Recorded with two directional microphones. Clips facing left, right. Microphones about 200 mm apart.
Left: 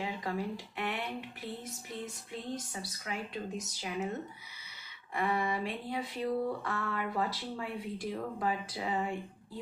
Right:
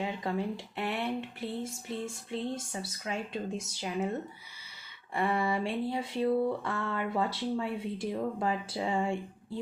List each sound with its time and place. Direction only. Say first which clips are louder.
0.0 s speech: right 3 dB; 25° right (ahead or behind)
5.1 s speech: right 3 dB; 30° right (ahead or behind)